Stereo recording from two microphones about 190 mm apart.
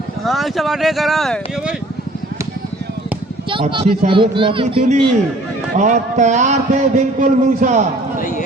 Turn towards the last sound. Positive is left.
turn(degrees=-40)  # may be behind; listen again after turning